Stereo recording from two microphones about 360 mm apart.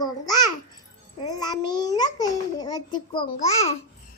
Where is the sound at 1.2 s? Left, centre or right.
Centre.